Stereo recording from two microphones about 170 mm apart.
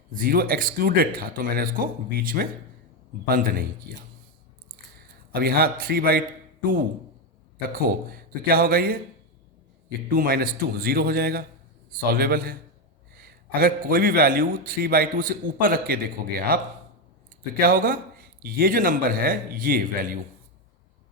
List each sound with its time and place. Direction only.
0.1 s a man's voice: 60° right (ahead or behind)
5.3 s a man's voice: 65° right (ahead or behind)
10.1 s a man's voice: 60° right (ahead or behind)
17.6 s a man's voice: 55° right (ahead or behind)